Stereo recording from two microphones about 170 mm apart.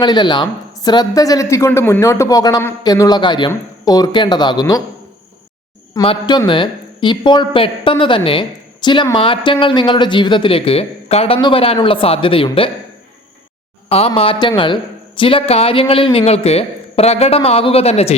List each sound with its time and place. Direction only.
0.0 s speech: 25° left (ahead or behind)
5.9 s a man's voice: 30° left (ahead or behind)
14.2 s a man's voice: 30° left (ahead or behind)